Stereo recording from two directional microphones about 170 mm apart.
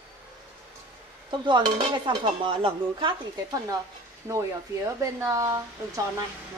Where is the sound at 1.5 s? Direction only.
25° right (ahead or behind).